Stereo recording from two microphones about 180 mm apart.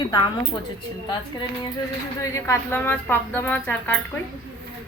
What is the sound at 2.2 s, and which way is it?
A woman's voice, 15° left (ahead or behind).